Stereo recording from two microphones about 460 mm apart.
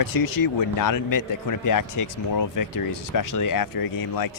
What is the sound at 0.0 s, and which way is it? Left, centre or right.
Speech, left.